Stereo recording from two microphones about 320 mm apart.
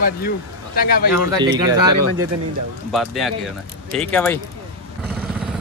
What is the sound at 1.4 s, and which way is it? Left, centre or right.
Speech, centre.